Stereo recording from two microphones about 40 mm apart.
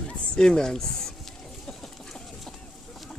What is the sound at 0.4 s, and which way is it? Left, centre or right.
Speech, centre.